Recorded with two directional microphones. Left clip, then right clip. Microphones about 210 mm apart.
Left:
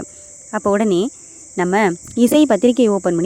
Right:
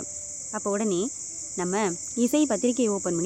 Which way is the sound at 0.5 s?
40° left (ahead or behind).